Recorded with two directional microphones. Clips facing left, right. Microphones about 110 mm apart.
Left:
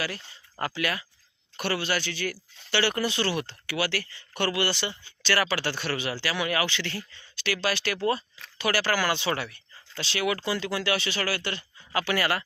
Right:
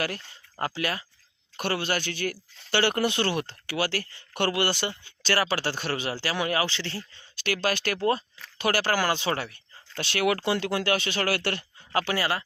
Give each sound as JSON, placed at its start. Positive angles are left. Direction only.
{"t": 0.6, "sound": "speech", "side_deg": -35}
{"t": 7.3, "sound": "speech", "side_deg": -45}
{"t": 10.0, "sound": "speech", "side_deg": -55}
{"t": 11.9, "sound": "speech", "side_deg": -30}